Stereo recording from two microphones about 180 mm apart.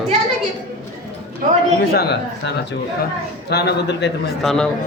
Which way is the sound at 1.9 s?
60° left (ahead or behind).